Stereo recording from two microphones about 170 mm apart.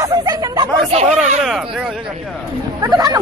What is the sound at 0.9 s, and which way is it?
Speech, 40° right (ahead or behind).